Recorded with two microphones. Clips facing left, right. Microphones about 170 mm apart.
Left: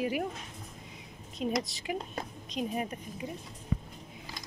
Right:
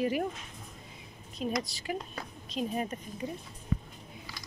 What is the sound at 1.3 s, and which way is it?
A woman's voice, 20° left (ahead or behind).